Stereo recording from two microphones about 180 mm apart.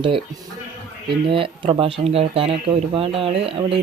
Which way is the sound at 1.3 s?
30° right (ahead or behind).